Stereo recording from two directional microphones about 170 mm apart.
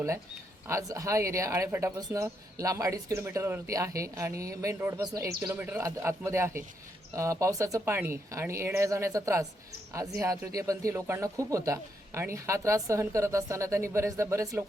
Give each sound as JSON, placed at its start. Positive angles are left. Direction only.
{"t": 0.7, "sound": "speech", "side_deg": -20}